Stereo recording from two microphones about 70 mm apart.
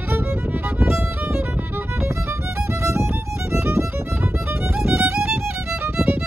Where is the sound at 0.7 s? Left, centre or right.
Right.